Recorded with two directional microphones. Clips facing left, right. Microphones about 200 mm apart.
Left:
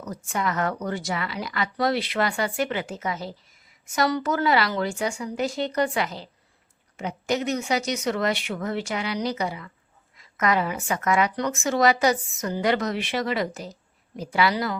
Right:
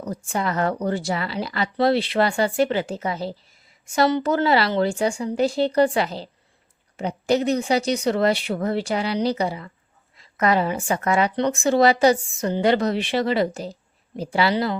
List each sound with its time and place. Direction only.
0.0 s a woman's voice: 30° right (ahead or behind)